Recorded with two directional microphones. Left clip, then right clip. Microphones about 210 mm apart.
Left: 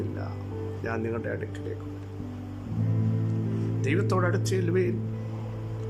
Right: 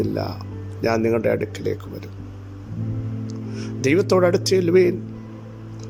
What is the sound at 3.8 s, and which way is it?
Speech, 25° right (ahead or behind).